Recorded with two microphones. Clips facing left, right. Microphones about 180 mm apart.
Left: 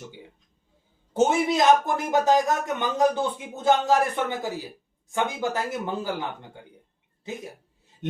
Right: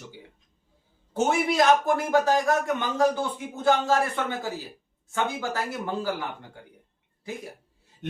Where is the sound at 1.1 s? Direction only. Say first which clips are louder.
Left 2 dB; 20° left (ahead or behind).